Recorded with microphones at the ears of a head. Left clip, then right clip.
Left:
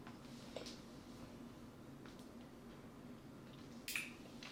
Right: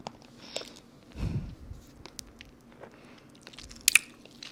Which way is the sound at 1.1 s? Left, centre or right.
Right.